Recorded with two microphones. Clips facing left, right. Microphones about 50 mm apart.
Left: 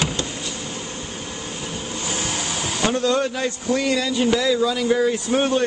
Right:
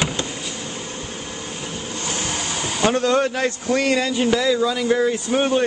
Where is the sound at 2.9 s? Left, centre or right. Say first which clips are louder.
Right 2 dB; right.